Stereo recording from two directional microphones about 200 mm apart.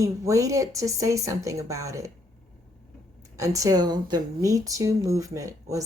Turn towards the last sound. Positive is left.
turn(degrees=-15)  # may be behind; listen again after turning